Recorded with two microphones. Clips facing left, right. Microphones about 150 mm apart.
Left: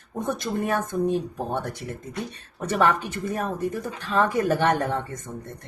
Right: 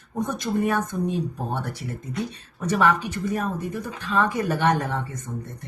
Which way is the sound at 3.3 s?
50° left (ahead or behind).